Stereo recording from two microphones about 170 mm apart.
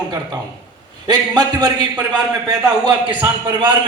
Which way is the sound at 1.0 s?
25° right (ahead or behind).